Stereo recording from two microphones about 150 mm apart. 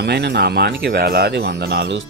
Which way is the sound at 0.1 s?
90° right.